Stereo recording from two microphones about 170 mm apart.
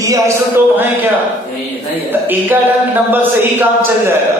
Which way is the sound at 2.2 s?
10° right (ahead or behind).